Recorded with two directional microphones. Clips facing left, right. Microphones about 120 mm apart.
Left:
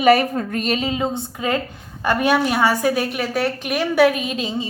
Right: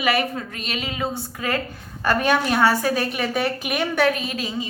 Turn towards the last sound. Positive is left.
turn(degrees=25)  # may be behind; listen again after turning